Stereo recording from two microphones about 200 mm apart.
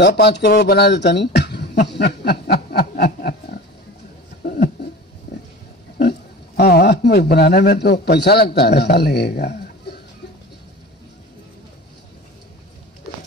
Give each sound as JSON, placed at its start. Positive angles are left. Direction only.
{"t": 0.0, "sound": "speech", "side_deg": 55}
{"t": 4.4, "sound": "a sound", "side_deg": 45}
{"t": 5.9, "sound": "a man's voice", "side_deg": 55}